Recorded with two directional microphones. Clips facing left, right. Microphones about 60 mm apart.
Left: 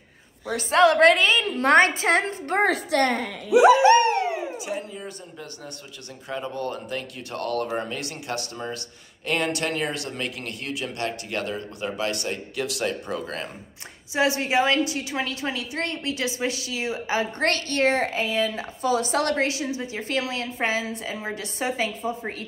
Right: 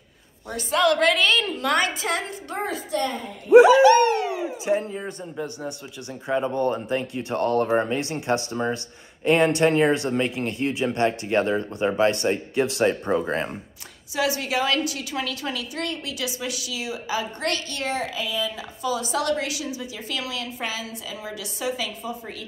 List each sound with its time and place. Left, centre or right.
0.6 s a woman's voice: left
1.1 s a woman's voice: centre
1.6 s a woman's voice: left
2.5 s a child's voice: left
3.6 s dog: left
4.6 s speech: right
6.2 s speech: right
14.1 s a woman's voice: left